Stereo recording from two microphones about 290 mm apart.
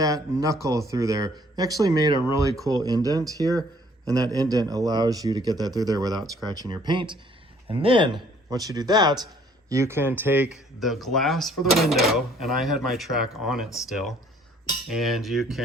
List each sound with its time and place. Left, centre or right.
0.0 s speech: centre